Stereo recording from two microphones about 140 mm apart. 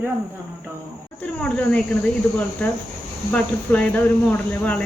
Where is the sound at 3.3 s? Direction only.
10° left (ahead or behind).